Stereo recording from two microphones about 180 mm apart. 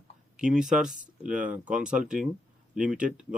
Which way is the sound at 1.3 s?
5° right (ahead or behind).